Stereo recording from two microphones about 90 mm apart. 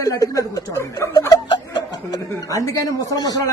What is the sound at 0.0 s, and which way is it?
Speech, 40° left (ahead or behind).